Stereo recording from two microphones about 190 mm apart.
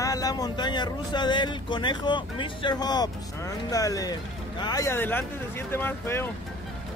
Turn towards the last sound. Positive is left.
turn(degrees=10)  # may be behind; listen again after turning